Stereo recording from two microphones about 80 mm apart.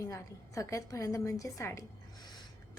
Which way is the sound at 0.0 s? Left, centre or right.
Left.